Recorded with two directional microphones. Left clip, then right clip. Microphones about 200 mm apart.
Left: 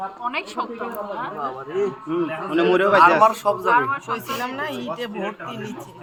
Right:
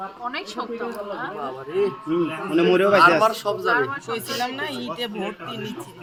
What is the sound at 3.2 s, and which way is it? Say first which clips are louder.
Speech: left 4 dB; 25° left (ahead or behind).